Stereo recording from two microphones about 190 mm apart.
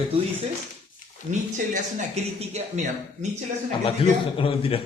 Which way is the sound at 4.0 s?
30° left (ahead or behind).